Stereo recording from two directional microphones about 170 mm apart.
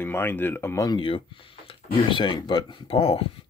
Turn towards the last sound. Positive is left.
turn(degrees=35)  # may be behind; listen again after turning